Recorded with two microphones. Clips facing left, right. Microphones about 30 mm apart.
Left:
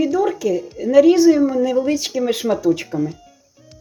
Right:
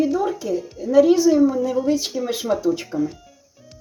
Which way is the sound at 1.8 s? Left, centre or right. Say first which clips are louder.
Left 2 dB; left.